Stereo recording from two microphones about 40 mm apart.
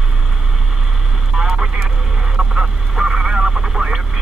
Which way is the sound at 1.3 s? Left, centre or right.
Centre.